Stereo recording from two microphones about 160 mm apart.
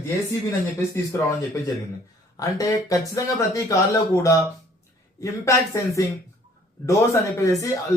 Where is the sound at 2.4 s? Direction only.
20° left (ahead or behind).